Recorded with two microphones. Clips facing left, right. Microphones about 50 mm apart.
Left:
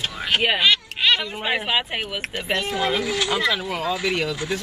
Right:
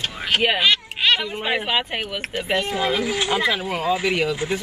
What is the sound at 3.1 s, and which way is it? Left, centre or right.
Speech, centre.